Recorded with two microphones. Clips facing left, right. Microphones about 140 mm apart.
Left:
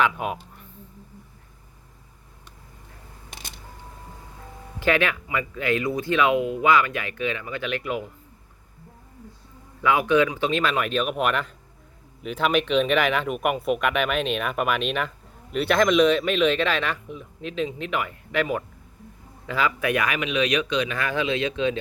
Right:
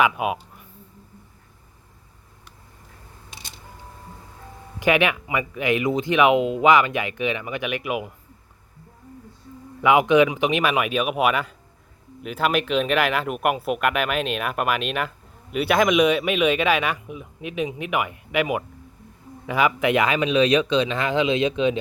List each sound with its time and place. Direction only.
0.0 s speech: 5° right (ahead or behind)
4.8 s speech: 15° right (ahead or behind)
9.8 s speech: 20° right (ahead or behind)